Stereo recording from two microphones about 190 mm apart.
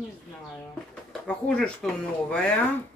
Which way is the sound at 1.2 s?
5° left (ahead or behind).